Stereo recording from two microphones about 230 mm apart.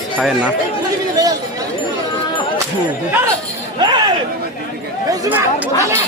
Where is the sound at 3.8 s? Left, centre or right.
Centre.